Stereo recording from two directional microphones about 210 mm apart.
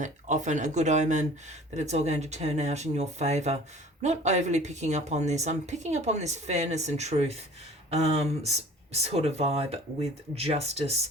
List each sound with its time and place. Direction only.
0.0 s speech: 35° right (ahead or behind)